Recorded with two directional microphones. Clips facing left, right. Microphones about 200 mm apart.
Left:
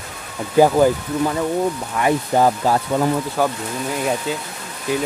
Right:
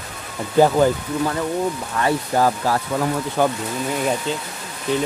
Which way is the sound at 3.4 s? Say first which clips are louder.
Right 2 dB; centre (ahead or behind).